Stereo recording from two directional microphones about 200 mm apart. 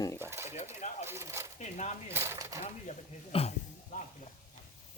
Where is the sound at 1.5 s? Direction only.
35° left (ahead or behind).